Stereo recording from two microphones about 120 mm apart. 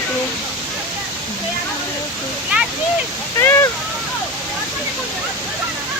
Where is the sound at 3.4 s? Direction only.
25° left (ahead or behind).